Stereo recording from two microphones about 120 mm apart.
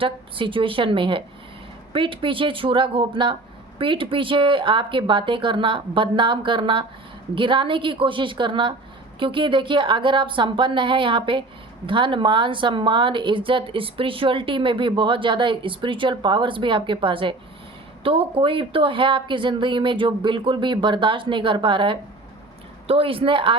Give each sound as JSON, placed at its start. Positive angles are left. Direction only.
{"t": 0.0, "sound": "a woman's voice", "side_deg": -45}